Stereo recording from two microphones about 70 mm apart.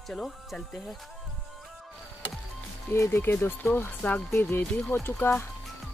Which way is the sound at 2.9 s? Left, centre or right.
Left.